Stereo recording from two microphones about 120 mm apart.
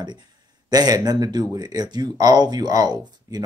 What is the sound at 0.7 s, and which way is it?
Speech, 30° right (ahead or behind).